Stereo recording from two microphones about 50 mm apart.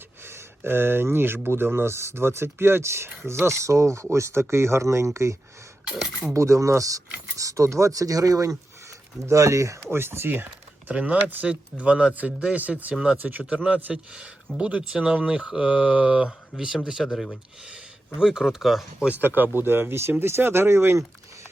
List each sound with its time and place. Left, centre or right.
0.3 s speech: right
4.1 s speech: right
9.9 s speech: right
10.9 s speech: right
16.6 s speech: centre
18.2 s speech: centre
19.1 s speech: right